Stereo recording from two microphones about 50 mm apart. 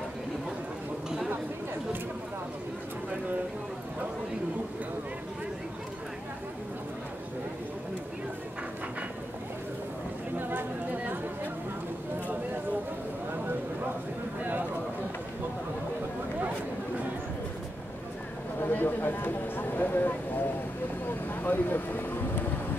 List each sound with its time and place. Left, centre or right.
10.3 s chatter: right
18.6 s a sound: left
21.4 s vehicle: left